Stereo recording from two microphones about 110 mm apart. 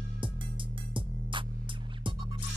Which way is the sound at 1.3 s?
50° right (ahead or behind).